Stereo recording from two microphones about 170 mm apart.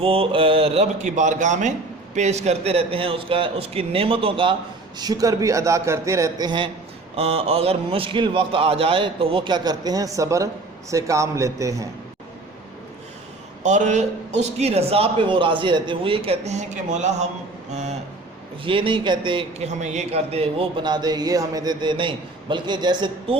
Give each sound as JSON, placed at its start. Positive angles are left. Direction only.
{"t": 0.0, "sound": "a man's voice", "side_deg": -30}
{"t": 7.2, "sound": "a man's voice", "side_deg": -35}
{"t": 13.6, "sound": "a man's voice", "side_deg": -45}
{"t": 18.6, "sound": "a man's voice", "side_deg": -30}